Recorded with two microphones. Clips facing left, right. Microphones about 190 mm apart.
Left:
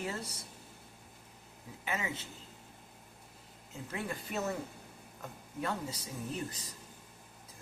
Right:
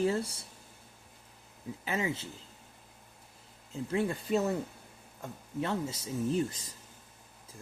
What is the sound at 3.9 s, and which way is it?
Speech, 30° right (ahead or behind).